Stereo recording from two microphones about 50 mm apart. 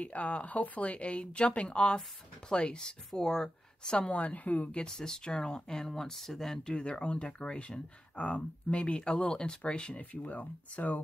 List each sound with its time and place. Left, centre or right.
0.0 s speech: left; by 4.1 s centre
4.1 s speech: left
4.8 s speech: centre
6.7 s speech: left
10.2 s speech: left